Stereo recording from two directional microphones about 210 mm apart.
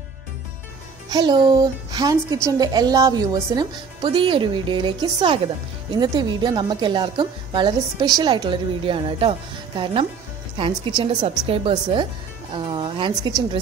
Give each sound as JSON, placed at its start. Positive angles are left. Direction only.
{"t": 1.1, "sound": "a woman's voice", "side_deg": -20}
{"t": 10.6, "sound": "a woman's voice", "side_deg": -25}